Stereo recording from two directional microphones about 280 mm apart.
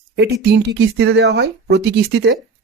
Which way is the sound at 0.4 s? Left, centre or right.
Right.